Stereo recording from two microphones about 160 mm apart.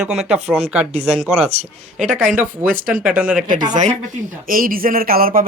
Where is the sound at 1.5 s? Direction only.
40° right (ahead or behind).